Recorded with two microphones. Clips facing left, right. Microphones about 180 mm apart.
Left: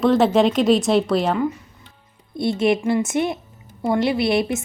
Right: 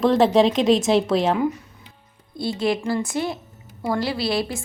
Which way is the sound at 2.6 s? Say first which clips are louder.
Left 4 dB; 20° left (ahead or behind).